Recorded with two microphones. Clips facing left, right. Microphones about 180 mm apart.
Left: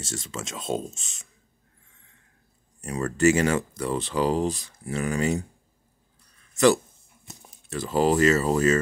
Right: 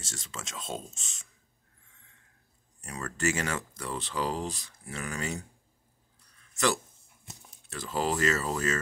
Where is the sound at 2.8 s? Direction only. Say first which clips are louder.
Left 11 dB; 15° left (ahead or behind).